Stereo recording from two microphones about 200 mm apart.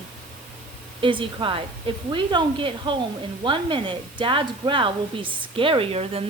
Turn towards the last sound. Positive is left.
turn(degrees=-30)  # may be behind; listen again after turning